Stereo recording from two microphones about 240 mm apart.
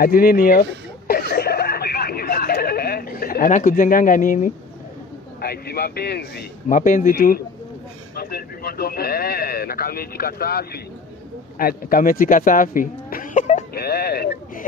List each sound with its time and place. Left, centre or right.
0.0 s throat clearing: left
5.4 s speech: left
13.8 s speech: left